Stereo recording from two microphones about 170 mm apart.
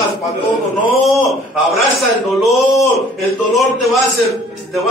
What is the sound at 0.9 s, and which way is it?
A man's voice, centre (ahead or behind).